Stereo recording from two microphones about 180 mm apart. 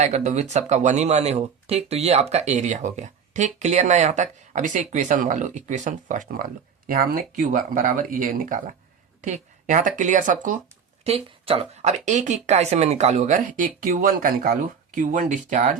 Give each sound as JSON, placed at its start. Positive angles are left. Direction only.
{"t": 0.0, "sound": "speech", "side_deg": -40}
{"t": 11.0, "sound": "speech", "side_deg": -35}